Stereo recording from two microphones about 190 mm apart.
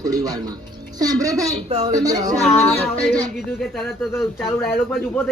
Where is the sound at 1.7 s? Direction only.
35° right (ahead or behind).